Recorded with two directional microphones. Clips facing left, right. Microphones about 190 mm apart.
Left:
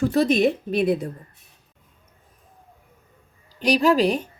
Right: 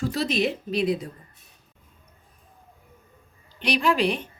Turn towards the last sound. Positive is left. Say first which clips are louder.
# left 5 dB
turn(degrees=40)  # may be behind; listen again after turning